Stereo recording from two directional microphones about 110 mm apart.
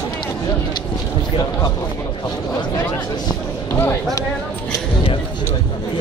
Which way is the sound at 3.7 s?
25° left (ahead or behind).